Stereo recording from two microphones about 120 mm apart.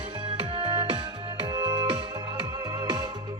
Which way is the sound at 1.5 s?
40° right (ahead or behind).